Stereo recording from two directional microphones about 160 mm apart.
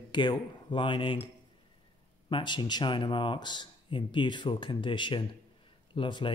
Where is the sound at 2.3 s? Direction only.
30° left (ahead or behind).